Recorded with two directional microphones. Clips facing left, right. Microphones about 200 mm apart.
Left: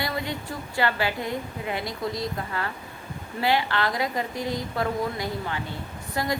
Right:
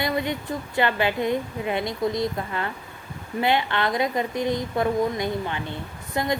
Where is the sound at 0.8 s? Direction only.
20° right (ahead or behind).